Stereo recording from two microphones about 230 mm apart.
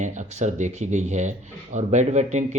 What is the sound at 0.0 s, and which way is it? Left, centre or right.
Speech, right.